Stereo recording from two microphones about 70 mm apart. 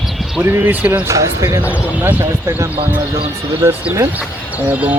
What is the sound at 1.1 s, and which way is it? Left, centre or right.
Speech, right.